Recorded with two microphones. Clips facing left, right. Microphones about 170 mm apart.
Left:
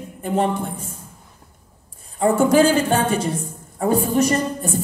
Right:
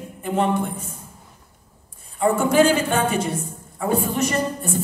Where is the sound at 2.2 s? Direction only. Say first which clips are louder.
Left 2 dB; 40° left (ahead or behind).